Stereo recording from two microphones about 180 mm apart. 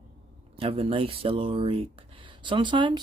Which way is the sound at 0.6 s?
30° right (ahead or behind).